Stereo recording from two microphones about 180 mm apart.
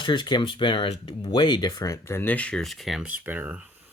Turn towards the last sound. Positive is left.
turn(degrees=-10)  # may be behind; listen again after turning